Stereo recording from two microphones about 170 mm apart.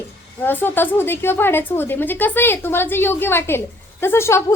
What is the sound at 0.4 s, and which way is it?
A woman's voice, 10° left (ahead or behind).